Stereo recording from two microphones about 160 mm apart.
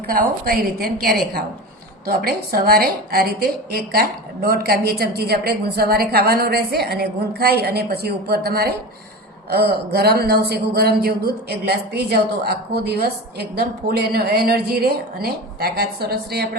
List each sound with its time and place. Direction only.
0.1 s a woman's voice: 70° right (ahead or behind); by 16.5 s 85° right